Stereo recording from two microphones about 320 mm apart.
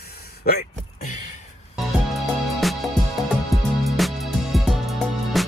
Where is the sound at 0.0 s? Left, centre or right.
Left.